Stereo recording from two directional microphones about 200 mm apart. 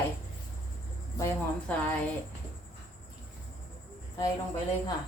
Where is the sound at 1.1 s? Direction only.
15° left (ahead or behind).